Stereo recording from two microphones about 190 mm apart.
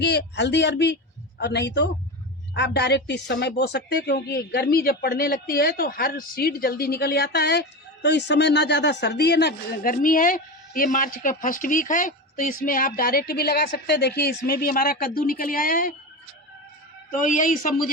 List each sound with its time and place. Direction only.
0.0 s a man's voice: 65° left (ahead or behind); by 16.0 s 45° left (ahead or behind)
17.1 s a woman's voice: 45° left (ahead or behind)